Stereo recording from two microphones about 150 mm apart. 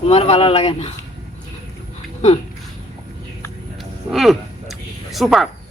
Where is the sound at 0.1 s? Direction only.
45° left (ahead or behind).